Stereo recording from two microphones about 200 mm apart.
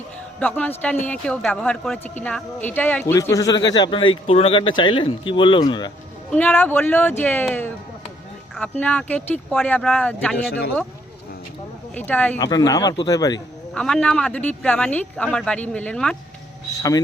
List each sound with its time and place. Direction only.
0.3 s a man's voice: 5° left (ahead or behind); by 5.9 s 25° left (ahead or behind)
6.3 s a man's voice: 10° left (ahead or behind)
11.9 s a man's voice: 5° left (ahead or behind)
12.4 s speech: 20° left (ahead or behind)
13.7 s speech: 5° left (ahead or behind)